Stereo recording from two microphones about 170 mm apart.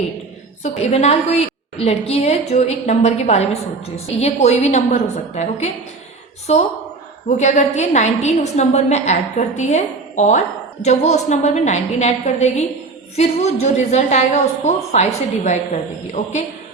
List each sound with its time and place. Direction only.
0.8 s a woman's voice: 40° left (ahead or behind)